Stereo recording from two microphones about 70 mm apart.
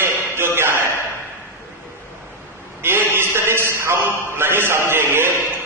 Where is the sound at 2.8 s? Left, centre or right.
Right.